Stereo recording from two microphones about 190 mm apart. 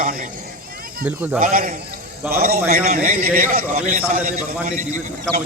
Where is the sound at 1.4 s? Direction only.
45° right (ahead or behind).